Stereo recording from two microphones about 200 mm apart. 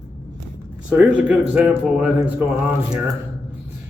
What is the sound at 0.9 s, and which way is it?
A man's voice, 10° right (ahead or behind).